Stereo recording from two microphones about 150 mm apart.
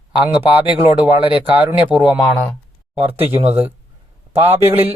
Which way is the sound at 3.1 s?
15° right (ahead or behind).